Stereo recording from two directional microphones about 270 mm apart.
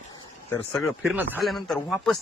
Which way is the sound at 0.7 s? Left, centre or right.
Centre.